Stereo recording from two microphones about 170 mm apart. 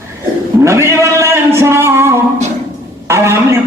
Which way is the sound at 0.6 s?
15° right (ahead or behind).